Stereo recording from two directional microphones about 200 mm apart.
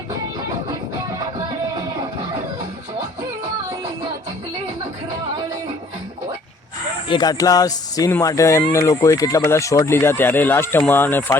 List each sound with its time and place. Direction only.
7.1 s speech: 20° left (ahead or behind)